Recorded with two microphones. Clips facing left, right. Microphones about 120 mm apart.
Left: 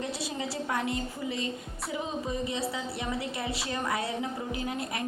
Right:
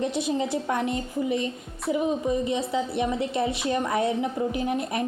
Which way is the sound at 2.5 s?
20° right (ahead or behind).